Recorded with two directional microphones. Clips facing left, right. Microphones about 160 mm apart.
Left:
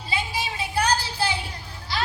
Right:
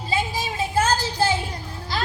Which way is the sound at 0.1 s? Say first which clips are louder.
Right 3 dB; 45° right (ahead or behind).